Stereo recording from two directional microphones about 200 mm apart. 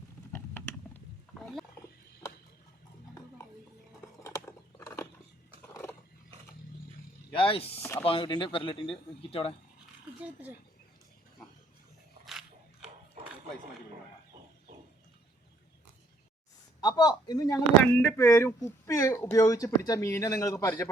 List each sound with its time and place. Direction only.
0.3 s mechanisms: 10° left (ahead or behind)
2.2 s a sound: 15° left (ahead or behind)
4.2 s a sound: 15° left (ahead or behind)
5.7 s roaring cats: 10° left (ahead or behind)
7.3 s speech: 25° left (ahead or behind)
7.8 s speech: 10° left (ahead or behind)
8.0 s speech: 25° left (ahead or behind)
16.8 s a man's voice: 20° left (ahead or behind)